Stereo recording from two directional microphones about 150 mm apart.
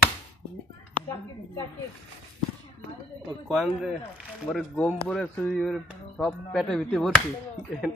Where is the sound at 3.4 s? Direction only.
5° right (ahead or behind).